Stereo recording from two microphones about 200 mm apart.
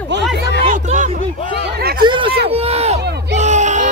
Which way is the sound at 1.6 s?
55° right (ahead or behind).